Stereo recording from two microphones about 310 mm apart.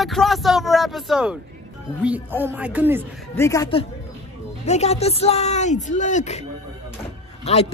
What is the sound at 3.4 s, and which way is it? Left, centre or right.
Speech, centre.